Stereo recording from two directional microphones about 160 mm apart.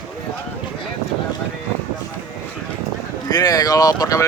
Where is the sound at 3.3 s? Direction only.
25° left (ahead or behind).